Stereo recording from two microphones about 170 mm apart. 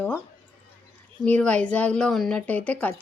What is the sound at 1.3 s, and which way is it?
A woman's voice, 5° left (ahead or behind).